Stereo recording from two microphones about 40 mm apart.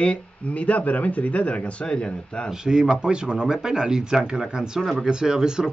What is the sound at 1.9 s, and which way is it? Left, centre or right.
Speech, left.